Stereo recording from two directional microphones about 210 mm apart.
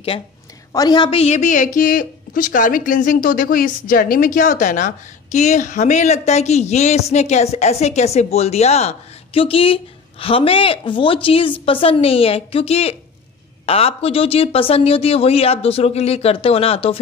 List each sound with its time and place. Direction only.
0.7 s a woman's voice: 20° left (ahead or behind)